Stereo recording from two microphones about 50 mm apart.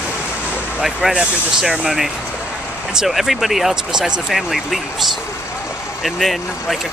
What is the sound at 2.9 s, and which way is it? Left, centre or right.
Speech, centre.